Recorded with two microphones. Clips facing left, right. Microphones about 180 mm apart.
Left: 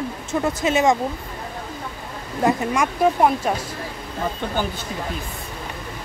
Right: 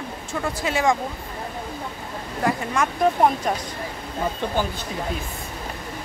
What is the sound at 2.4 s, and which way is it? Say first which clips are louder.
Speech: left 3 dB; 15° left (ahead or behind).